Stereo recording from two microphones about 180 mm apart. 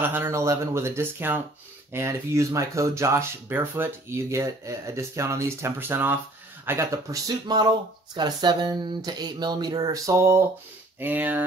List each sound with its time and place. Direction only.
0.0 s speech: 10° right (ahead or behind)